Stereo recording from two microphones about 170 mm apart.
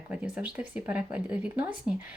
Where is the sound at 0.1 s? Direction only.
5° right (ahead or behind).